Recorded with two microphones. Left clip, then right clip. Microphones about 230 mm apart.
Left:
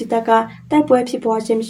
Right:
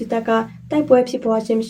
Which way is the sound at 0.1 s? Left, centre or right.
Centre.